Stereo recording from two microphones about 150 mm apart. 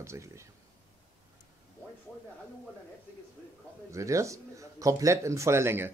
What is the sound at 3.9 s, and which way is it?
Speech, 20° right (ahead or behind).